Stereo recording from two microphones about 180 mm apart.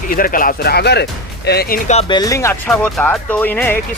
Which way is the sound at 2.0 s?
20° left (ahead or behind).